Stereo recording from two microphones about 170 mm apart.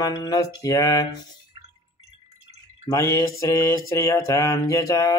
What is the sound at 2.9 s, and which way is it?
Mantra, 20° left (ahead or behind).